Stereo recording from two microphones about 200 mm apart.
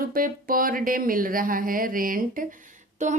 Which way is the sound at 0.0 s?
45° right (ahead or behind).